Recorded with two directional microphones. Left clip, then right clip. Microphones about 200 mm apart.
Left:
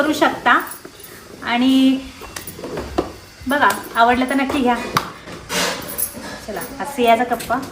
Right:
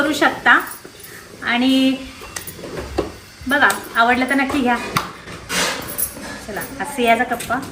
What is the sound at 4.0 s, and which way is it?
Speech, centre (ahead or behind).